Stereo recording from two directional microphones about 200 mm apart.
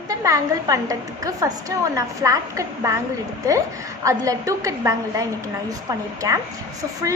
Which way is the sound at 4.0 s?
15° right (ahead or behind).